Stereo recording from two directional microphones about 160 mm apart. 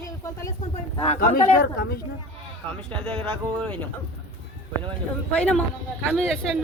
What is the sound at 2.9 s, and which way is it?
Speech, 5° left (ahead or behind).